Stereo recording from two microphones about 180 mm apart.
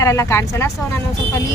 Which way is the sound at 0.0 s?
15° left (ahead or behind).